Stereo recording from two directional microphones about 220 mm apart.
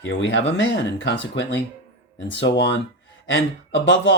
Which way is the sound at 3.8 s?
55° left (ahead or behind).